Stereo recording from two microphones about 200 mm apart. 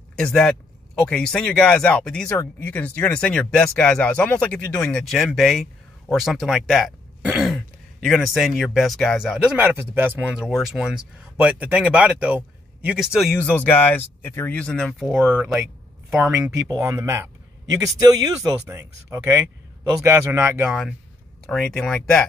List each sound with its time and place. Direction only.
0.2 s a man's voice: 5° left (ahead or behind); by 20.7 s 10° right (ahead or behind)
21.5 s speech: 5° left (ahead or behind)